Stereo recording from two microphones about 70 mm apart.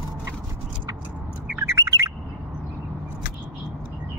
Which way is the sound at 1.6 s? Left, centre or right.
Right.